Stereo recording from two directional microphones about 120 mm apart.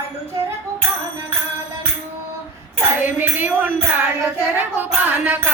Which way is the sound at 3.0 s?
15° right (ahead or behind).